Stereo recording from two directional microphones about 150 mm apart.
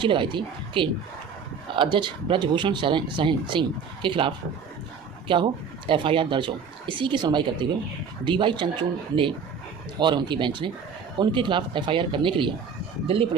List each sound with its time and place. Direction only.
0.0 s speech: 30° right (ahead or behind)
5.3 s speech: 35° right (ahead or behind)